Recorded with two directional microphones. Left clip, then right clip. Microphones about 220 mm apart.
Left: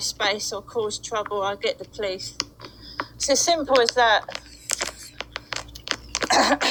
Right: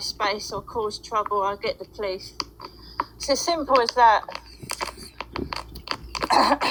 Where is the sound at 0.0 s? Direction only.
5° left (ahead or behind).